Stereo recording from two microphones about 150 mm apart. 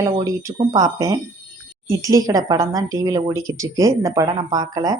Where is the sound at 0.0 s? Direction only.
20° right (ahead or behind).